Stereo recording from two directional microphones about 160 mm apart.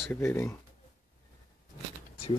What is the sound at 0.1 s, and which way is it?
Speech, 15° left (ahead or behind).